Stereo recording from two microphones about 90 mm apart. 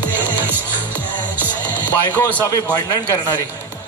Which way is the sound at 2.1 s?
15° left (ahead or behind).